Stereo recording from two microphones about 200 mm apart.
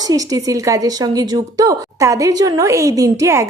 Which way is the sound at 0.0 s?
20° right (ahead or behind).